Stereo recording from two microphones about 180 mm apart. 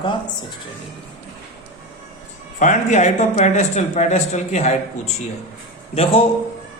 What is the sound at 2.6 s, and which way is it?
Speech, 40° left (ahead or behind).